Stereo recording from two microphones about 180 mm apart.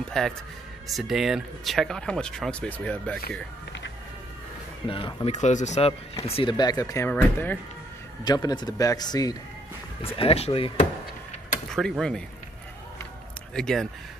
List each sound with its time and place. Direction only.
0.2 s speech: 5° left (ahead or behind)
4.8 s a man's voice: 30° left (ahead or behind)
7.1 s speech: 10° left (ahead or behind)
8.2 s a man's voice: 20° left (ahead or behind)
10.1 s speech: 35° left (ahead or behind)
11.7 s speech: 5° left (ahead or behind)
13.6 s speech: 5° left (ahead or behind)